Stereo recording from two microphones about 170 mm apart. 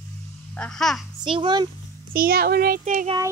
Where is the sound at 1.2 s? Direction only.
30° right (ahead or behind).